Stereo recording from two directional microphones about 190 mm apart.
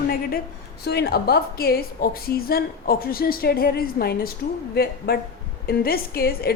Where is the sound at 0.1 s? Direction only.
50° left (ahead or behind).